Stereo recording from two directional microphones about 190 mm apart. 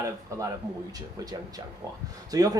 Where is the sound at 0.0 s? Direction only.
15° right (ahead or behind).